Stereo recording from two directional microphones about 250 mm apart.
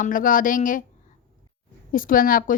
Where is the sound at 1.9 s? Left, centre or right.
Left.